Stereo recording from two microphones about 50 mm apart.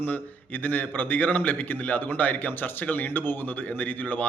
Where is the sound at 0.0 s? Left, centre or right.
Left.